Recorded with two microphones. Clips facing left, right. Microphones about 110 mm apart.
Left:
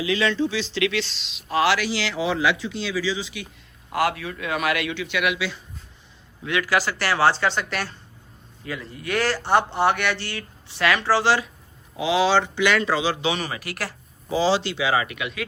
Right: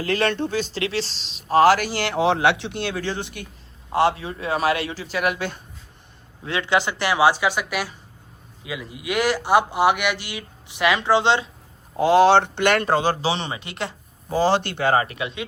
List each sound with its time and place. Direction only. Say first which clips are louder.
0.0 s speech: even; 55° right (ahead or behind)
3.8 s a man's voice: right 4 dB; 30° right (ahead or behind); by 5.6 s 50° right (ahead or behind)
6.4 s speech: right 1 dB; 30° right (ahead or behind)
11.9 s speech: right 5 dB; 50° right (ahead or behind)
13.2 s speech: right 1 dB; 30° right (ahead or behind)
14.3 s speech: right 1 dB; 50° right (ahead or behind)
15.0 s a man's voice: right 1 dB; 30° right (ahead or behind)